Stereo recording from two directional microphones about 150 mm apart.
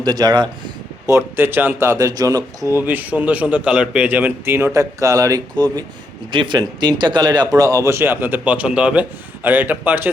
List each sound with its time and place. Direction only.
0.0 s speech: 25° right (ahead or behind)
1.1 s speech: 15° right (ahead or behind)